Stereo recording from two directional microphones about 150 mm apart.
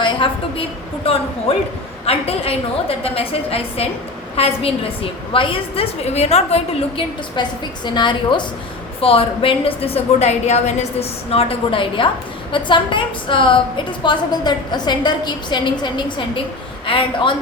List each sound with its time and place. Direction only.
0.0 s a woman's voice: 35° left (ahead or behind)
2.0 s a woman's voice: 40° left (ahead or behind)
7.4 s a woman's voice: 30° left (ahead or behind)